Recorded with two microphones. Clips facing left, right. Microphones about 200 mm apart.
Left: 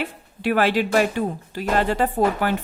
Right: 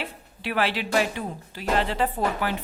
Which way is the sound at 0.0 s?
45° left (ahead or behind).